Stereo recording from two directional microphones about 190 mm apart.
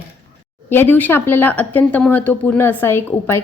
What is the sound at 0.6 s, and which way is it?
Speech, 10° left (ahead or behind).